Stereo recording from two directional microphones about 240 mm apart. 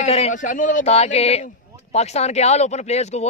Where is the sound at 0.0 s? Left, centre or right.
Left.